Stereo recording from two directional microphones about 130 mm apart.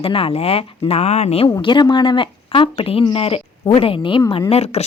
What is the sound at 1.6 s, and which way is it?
Speech, 35° left (ahead or behind).